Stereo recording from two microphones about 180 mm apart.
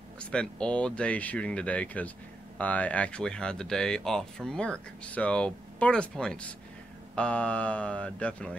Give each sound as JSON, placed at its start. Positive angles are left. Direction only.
{"t": 0.2, "sound": "speech", "side_deg": 5}